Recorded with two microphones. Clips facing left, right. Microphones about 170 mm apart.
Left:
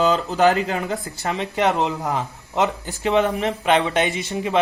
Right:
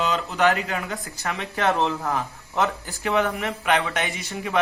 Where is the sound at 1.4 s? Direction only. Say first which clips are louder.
Left 2 dB; 20° left (ahead or behind).